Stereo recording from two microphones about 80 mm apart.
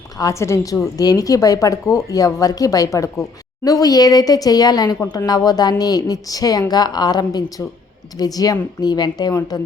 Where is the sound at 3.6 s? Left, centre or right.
Left.